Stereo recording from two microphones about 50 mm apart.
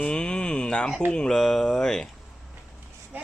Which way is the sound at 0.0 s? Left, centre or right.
Centre.